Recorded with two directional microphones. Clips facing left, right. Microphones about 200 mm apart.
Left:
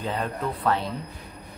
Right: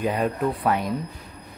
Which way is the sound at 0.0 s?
15° right (ahead or behind).